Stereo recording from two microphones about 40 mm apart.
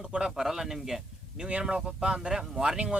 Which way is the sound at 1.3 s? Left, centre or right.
Right.